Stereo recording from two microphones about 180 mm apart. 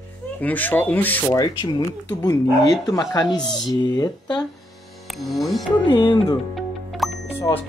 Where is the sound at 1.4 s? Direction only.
20° left (ahead or behind).